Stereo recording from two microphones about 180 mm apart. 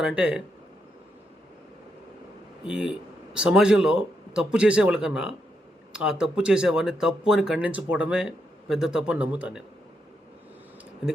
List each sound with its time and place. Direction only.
0.0 s speech: 5° right (ahead or behind)
2.6 s speech: 5° right (ahead or behind)